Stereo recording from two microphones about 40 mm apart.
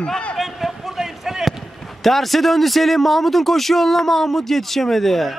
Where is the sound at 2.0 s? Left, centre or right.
Centre.